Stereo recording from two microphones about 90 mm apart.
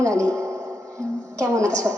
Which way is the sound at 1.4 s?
35° right (ahead or behind).